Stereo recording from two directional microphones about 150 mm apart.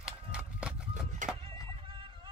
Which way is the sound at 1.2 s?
60° right (ahead or behind).